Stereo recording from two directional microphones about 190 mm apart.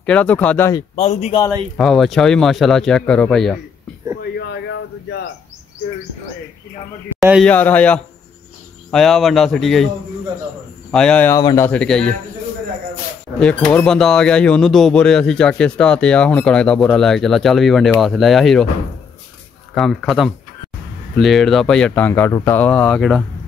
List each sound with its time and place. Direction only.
0.0 s speech: 5° left (ahead or behind)
0.9 s speech: 35° left (ahead or behind)
1.8 s speech: centre (ahead or behind)
4.2 s a sound: 65° left (ahead or behind)
7.2 s a man's voice: 5° right (ahead or behind)
7.4 s speech: 10° left (ahead or behind)
10.9 s speech: 5° left (ahead or behind)
11.3 s speech: 15° left (ahead or behind)
13.4 s speech: 5° left (ahead or behind)
19.7 s speech: centre (ahead or behind)